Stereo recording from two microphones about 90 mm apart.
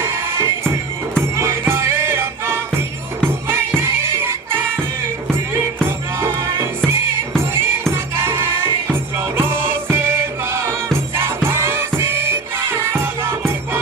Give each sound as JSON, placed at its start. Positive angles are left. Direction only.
{"t": 0.0, "sound": "music", "side_deg": -25}
{"t": 3.8, "sound": "music", "side_deg": -25}